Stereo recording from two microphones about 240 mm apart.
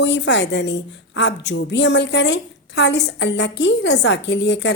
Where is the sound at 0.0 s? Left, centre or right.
Left.